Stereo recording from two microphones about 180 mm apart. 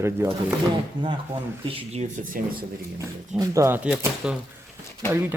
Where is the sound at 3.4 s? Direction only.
15° right (ahead or behind).